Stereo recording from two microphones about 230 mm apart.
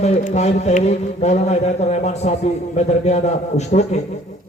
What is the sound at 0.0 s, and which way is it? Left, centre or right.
A man's voice, left.